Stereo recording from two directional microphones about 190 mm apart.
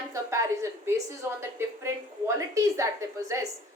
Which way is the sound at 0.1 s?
15° right (ahead or behind).